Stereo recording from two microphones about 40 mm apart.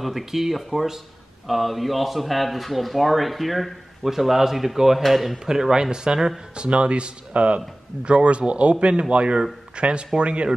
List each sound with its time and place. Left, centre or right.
0.0 s speech: centre; by 10.5 s right